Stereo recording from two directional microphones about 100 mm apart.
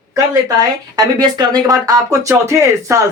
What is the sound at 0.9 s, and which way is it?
Speech, 40° right (ahead or behind).